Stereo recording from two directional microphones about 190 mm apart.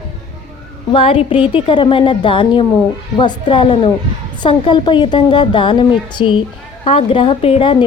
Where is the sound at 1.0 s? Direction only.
30° left (ahead or behind).